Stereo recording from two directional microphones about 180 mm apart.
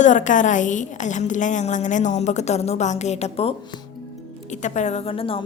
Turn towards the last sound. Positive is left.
turn(degrees=30)  # may be behind; listen again after turning